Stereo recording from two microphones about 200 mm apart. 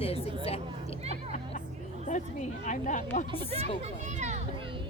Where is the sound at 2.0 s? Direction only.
40° left (ahead or behind).